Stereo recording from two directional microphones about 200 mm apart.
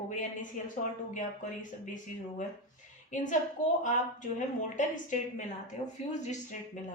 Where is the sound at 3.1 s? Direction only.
40° left (ahead or behind).